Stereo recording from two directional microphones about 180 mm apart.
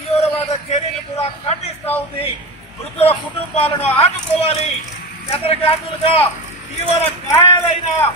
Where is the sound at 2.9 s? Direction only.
35° left (ahead or behind).